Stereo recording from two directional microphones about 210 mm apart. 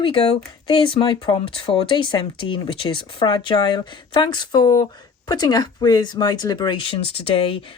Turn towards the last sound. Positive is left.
turn(degrees=25)  # may be behind; listen again after turning